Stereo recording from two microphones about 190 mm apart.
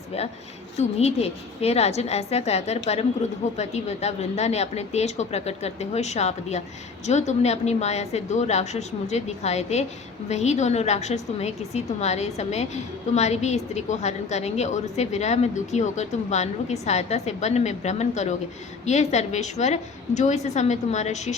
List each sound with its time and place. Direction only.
0.8 s a woman's voice: 35° left (ahead or behind)